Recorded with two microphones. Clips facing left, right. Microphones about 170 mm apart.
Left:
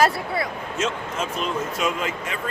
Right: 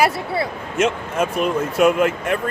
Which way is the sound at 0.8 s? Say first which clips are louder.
Right 8 dB; 60° right (ahead or behind).